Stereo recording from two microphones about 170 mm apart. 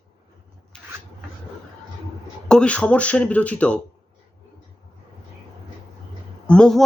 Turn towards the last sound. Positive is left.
turn(degrees=5)  # may be behind; listen again after turning